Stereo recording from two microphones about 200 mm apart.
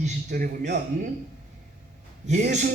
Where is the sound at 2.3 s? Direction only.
35° right (ahead or behind).